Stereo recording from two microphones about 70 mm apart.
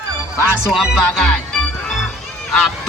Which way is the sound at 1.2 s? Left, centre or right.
Centre.